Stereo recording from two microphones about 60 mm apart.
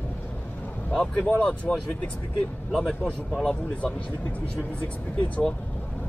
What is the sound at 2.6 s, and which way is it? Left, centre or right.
Speech, centre.